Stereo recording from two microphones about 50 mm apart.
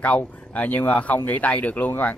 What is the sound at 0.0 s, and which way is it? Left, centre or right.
Speech, left.